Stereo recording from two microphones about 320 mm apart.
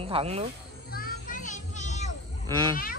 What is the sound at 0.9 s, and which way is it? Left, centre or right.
Children playing, left.